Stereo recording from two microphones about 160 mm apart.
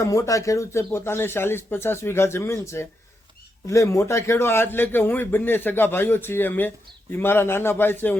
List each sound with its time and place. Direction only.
0.0 s a man's voice: 20° left (ahead or behind)